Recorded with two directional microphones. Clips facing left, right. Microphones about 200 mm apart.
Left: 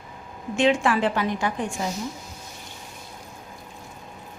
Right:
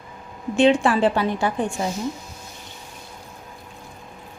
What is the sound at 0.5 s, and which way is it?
A woman's voice, 35° right (ahead or behind).